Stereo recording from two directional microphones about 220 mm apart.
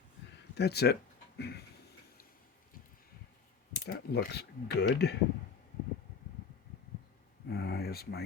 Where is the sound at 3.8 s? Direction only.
45° left (ahead or behind).